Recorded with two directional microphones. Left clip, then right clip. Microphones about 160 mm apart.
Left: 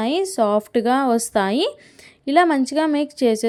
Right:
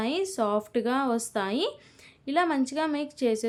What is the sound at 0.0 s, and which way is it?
A woman's voice, 40° left (ahead or behind).